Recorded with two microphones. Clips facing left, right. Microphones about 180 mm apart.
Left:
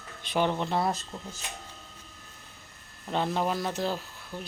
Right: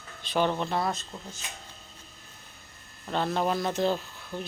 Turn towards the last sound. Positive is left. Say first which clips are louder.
# right 3 dB
turn(degrees=5)  # may be behind; listen again after turning